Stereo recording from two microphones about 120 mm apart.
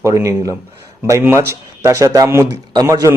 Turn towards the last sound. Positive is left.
turn(degrees=-30)  # may be behind; listen again after turning